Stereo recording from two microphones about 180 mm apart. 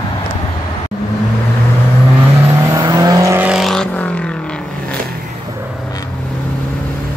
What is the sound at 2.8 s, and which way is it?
Vehicle, 20° right (ahead or behind).